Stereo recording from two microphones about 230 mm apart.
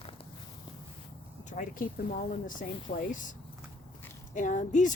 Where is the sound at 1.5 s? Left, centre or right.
Left.